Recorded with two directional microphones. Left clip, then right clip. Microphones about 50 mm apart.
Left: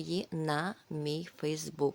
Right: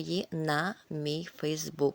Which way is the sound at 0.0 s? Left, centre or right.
Right.